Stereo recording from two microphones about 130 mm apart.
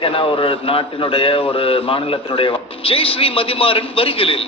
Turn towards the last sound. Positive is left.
turn(degrees=45)  # may be behind; listen again after turning